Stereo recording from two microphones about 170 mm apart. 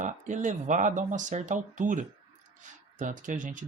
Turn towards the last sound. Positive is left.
turn(degrees=-50)  # may be behind; listen again after turning